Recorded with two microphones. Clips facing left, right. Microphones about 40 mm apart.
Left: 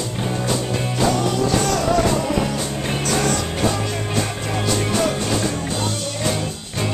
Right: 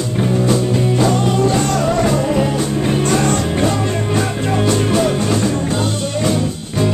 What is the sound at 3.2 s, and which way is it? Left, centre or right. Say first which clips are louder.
Music: right 5 dB; right.